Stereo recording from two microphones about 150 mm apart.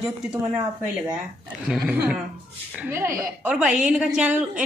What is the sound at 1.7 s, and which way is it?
Speech, 5° right (ahead or behind).